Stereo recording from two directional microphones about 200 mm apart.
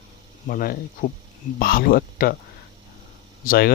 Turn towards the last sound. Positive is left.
turn(degrees=45)  # may be behind; listen again after turning